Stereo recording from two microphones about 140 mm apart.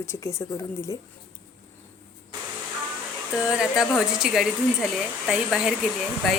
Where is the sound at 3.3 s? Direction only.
5° right (ahead or behind).